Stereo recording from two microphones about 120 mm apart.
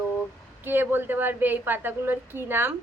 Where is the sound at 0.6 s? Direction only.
15° right (ahead or behind).